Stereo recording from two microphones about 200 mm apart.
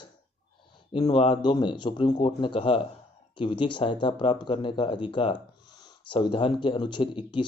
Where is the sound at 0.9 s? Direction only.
25° left (ahead or behind).